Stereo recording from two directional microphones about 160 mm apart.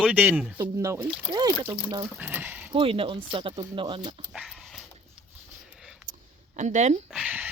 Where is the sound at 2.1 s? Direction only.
10° right (ahead or behind).